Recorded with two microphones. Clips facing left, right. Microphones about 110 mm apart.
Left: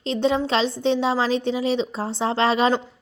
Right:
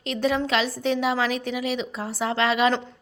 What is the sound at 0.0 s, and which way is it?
A woman's voice, 25° left (ahead or behind).